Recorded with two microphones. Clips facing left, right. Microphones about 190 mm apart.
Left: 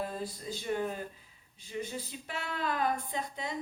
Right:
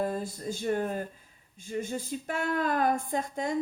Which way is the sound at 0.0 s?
50° right (ahead or behind).